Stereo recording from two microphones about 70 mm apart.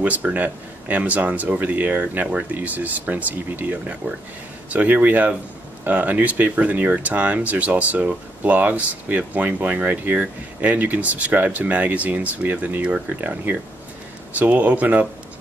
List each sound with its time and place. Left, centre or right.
0.0 s speech: right